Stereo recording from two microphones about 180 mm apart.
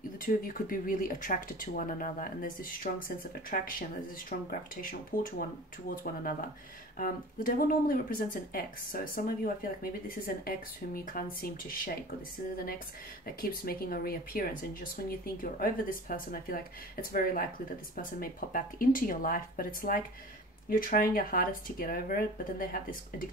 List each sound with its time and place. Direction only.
0.2 s speech: 50° left (ahead or behind)
5.1 s speech: 50° left (ahead or behind)
7.0 s speech: 50° left (ahead or behind)
13.4 s speech: 55° left (ahead or behind)